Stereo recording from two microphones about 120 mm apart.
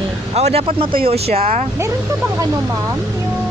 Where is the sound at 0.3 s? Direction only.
60° right (ahead or behind).